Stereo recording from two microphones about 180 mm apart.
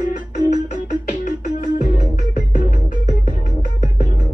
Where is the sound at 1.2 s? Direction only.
50° left (ahead or behind).